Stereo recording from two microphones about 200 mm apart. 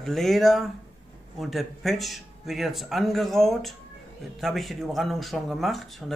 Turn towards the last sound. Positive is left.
turn(degrees=0)  # may be behind; listen again after turning